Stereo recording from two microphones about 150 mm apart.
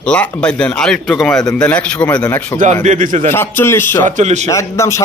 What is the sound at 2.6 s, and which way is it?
Speech, 50° right (ahead or behind).